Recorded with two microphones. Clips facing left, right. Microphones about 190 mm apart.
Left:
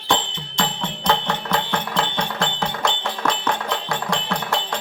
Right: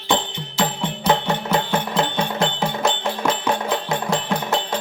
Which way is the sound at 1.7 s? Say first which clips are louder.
Right 3 dB; 20° right (ahead or behind).